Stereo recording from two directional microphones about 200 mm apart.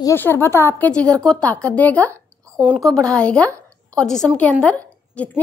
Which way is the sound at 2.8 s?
5° left (ahead or behind).